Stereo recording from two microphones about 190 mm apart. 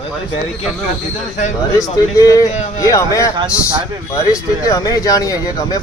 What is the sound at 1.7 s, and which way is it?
Speech, 15° left (ahead or behind).